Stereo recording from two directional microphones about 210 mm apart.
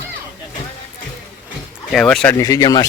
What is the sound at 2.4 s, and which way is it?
Speech, 15° left (ahead or behind).